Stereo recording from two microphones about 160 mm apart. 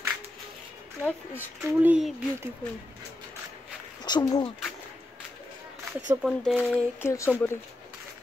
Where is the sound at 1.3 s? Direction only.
10° right (ahead or behind).